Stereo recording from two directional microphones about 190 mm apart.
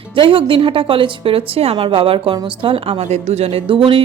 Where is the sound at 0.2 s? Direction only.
25° right (ahead or behind).